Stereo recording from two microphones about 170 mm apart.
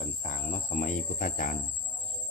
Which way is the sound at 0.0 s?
50° left (ahead or behind).